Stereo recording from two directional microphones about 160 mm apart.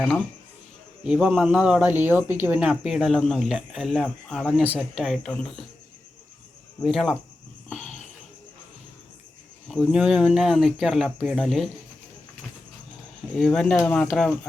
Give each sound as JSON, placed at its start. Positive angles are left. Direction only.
{"t": 1.0, "sound": "speech", "side_deg": -5}
{"t": 4.6, "sound": "speech", "side_deg": -10}
{"t": 4.9, "sound": "speech", "side_deg": 0}
{"t": 6.8, "sound": "speech", "side_deg": 0}
{"t": 7.7, "sound": "cricket", "side_deg": 50}
{"t": 9.6, "sound": "speech", "side_deg": 0}
{"t": 13.3, "sound": "speech", "side_deg": 0}